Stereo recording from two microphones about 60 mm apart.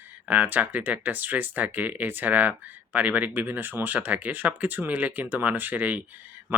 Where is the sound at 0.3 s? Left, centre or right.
Right.